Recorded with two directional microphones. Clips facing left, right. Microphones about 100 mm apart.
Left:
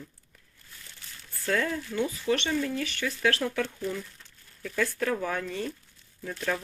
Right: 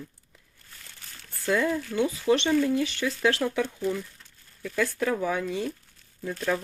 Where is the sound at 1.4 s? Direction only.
10° right (ahead or behind).